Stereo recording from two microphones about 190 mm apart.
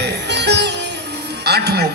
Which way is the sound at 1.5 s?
60° right (ahead or behind).